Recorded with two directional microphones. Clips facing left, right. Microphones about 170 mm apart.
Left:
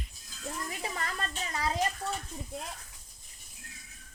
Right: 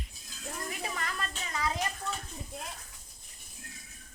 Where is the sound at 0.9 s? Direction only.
35° left (ahead or behind).